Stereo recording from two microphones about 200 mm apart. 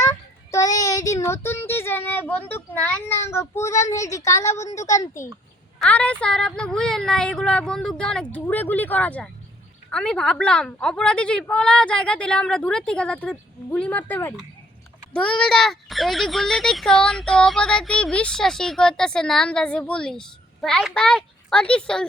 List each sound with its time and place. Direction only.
0.5 s a child's voice: 15° left (ahead or behind)